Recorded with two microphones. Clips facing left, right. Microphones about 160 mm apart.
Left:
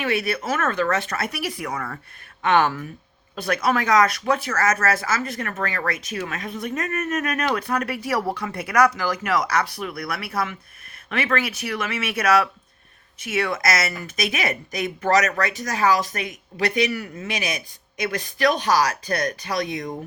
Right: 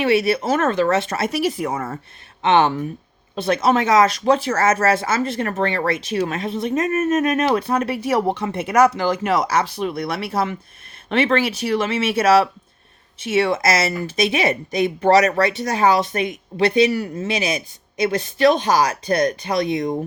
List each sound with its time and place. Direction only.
0.0 s speech: 25° right (ahead or behind)